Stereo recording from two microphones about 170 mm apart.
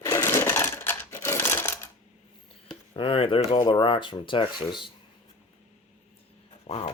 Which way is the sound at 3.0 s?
30° left (ahead or behind).